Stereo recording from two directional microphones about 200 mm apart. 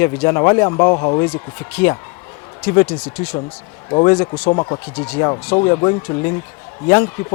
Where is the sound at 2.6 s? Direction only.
10° left (ahead or behind).